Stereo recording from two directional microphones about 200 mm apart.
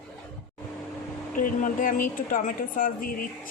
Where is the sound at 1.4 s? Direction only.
40° left (ahead or behind).